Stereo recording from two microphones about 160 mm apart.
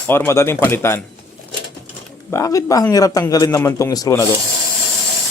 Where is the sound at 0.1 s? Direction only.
15° left (ahead or behind).